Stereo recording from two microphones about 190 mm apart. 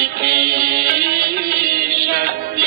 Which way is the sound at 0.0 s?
55° right (ahead or behind).